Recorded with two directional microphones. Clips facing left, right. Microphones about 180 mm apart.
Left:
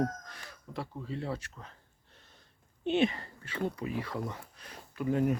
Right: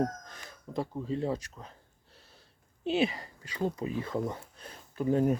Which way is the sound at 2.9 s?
5° right (ahead or behind).